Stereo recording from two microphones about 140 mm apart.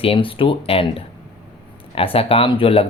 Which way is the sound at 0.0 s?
40° left (ahead or behind).